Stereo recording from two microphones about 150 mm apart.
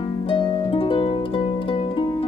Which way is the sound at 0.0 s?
35° left (ahead or behind).